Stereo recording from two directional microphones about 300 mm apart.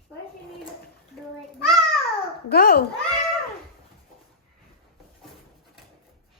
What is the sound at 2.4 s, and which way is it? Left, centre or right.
Speech, left.